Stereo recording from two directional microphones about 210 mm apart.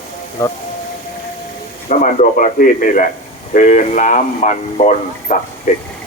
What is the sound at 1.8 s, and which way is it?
Speech, 35° left (ahead or behind).